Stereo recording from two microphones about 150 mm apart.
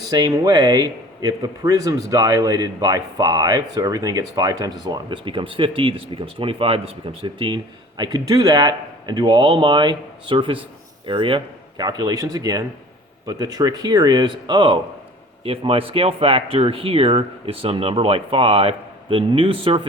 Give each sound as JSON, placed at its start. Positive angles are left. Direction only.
{"t": 0.1, "sound": "speech", "side_deg": -30}